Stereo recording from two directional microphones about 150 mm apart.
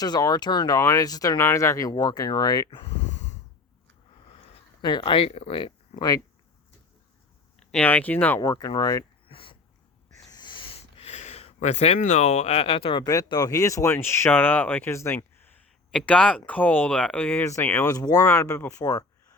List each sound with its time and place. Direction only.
0.0 s speech: 25° left (ahead or behind)
3.0 s snort: 50° left (ahead or behind)
4.8 s speech: 30° left (ahead or behind)
7.7 s speech: 10° left (ahead or behind)
8.4 s speech: 25° left (ahead or behind)
9.2 s a sound: 35° left (ahead or behind)
13.2 s speech: 25° left (ahead or behind)